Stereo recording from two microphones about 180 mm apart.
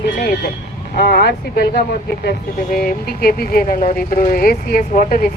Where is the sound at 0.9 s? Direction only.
60° left (ahead or behind).